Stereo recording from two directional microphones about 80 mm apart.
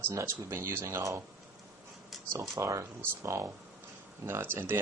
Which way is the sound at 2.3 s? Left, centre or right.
Right.